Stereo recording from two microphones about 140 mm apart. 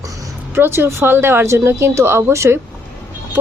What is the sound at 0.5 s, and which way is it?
Speech, 15° right (ahead or behind).